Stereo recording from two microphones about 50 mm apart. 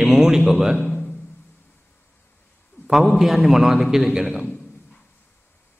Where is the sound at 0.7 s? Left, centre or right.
Left.